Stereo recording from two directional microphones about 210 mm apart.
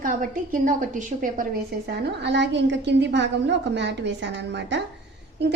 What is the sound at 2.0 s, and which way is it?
A woman's voice, 55° right (ahead or behind).